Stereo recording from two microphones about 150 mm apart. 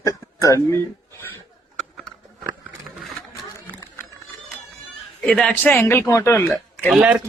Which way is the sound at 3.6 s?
10° left (ahead or behind).